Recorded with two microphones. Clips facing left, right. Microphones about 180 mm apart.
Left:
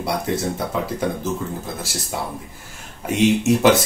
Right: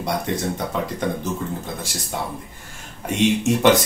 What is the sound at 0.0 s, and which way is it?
Speech, 5° left (ahead or behind).